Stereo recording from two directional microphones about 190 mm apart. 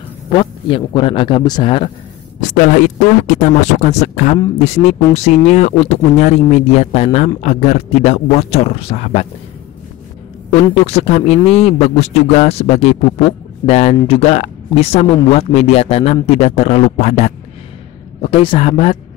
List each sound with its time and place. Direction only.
0.3 s speech: 25° left (ahead or behind)
2.4 s speech: 40° left (ahead or behind)
10.5 s speech: 35° left (ahead or behind)